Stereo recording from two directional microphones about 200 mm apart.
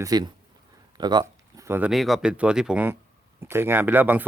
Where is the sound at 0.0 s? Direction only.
20° right (ahead or behind).